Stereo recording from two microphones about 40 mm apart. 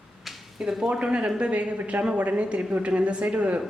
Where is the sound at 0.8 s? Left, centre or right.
Right.